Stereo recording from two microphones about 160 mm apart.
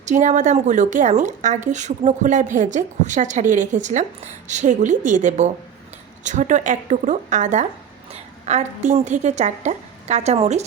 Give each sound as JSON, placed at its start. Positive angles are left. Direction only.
{"t": 0.0, "sound": "a woman's voice", "side_deg": -50}